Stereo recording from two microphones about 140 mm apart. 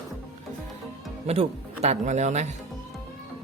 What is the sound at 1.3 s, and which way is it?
Speech, 50° right (ahead or behind).